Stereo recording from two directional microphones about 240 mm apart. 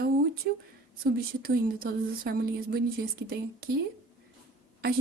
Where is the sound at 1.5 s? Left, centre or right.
Right.